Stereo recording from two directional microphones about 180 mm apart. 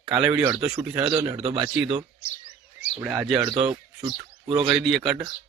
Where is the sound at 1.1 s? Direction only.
20° right (ahead or behind).